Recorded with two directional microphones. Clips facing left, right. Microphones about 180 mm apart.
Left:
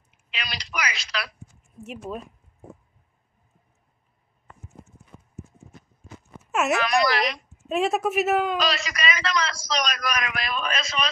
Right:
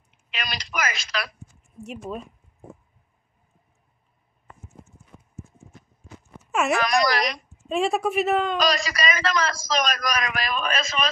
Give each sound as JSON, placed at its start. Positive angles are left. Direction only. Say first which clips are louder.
{"t": 0.3, "sound": "a sound", "louder": "right 2 dB", "side_deg": -45}
{"t": 1.8, "sound": "speech", "louder": "right 1 dB", "side_deg": 0}
{"t": 6.4, "sound": "a sound", "louder": "even", "side_deg": 0}
{"t": 6.8, "sound": "speech", "louder": "even", "side_deg": -40}
{"t": 7.6, "sound": "speech", "louder": "even", "side_deg": 5}
{"t": 8.5, "sound": "speech", "louder": "right 3 dB", "side_deg": -40}
{"t": 9.1, "sound": "a man's voice", "louder": "right 2 dB", "side_deg": -50}